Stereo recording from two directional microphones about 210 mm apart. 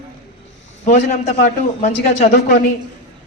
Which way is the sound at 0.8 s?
35° left (ahead or behind).